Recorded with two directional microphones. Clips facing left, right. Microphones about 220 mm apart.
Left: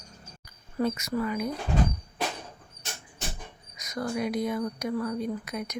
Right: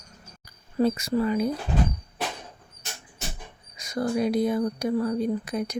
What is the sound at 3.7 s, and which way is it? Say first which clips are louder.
Speech: right 5 dB; 30° right (ahead or behind).